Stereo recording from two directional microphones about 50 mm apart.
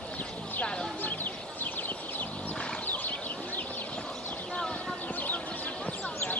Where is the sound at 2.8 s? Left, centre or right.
Left.